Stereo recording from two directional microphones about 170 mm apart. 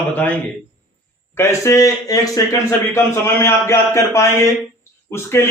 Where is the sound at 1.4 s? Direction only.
15° left (ahead or behind).